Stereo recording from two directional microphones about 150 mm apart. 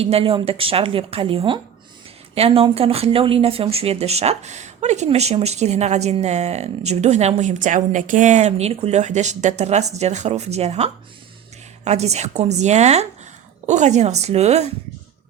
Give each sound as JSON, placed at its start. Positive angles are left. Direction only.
{"t": 0.0, "sound": "a woman's voice", "side_deg": -40}